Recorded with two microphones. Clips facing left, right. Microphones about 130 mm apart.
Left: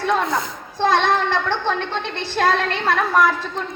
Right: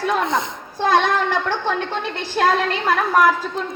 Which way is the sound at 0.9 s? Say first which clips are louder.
Right 1 dB; 10° right (ahead or behind).